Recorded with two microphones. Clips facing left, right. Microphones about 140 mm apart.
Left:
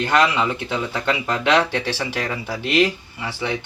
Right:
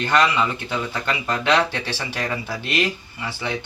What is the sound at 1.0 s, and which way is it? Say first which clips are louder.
Speech: left 2 dB; 15° left (ahead or behind).